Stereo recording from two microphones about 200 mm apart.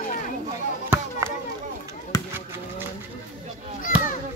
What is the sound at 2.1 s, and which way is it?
Basketball bounce, 20° left (ahead or behind).